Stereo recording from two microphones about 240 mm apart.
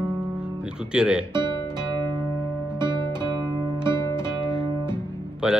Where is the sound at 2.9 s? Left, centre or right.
Centre.